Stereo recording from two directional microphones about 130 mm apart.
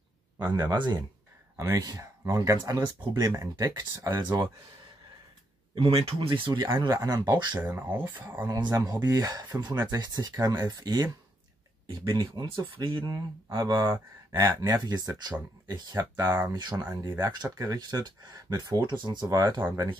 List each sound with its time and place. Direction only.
0.4 s speech: 35° right (ahead or behind)
5.8 s speech: 45° right (ahead or behind)
6.9 s speech: 30° right (ahead or behind)
7.6 s speech: 15° right (ahead or behind)
8.8 s speech: 30° right (ahead or behind)
15.9 s speech: 20° right (ahead or behind)
16.5 s speech: 35° right (ahead or behind)